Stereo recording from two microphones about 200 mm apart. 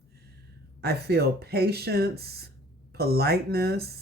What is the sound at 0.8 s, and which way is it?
Speech, 50° right (ahead or behind).